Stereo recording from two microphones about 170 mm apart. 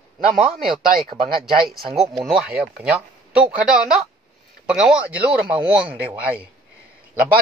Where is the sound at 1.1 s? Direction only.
60° right (ahead or behind).